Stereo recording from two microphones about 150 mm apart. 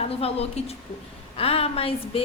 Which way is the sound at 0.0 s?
40° left (ahead or behind).